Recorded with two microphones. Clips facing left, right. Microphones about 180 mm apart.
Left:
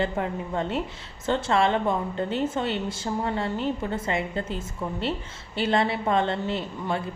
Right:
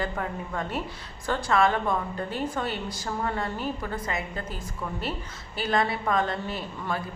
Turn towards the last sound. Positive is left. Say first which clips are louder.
# left 3 dB
turn(degrees=25)  # may be behind; listen again after turning